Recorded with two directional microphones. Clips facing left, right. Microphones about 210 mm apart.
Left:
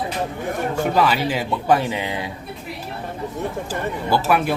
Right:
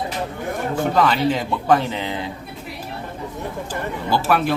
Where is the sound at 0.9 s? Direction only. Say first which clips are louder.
Right 2 dB; 10° left (ahead or behind).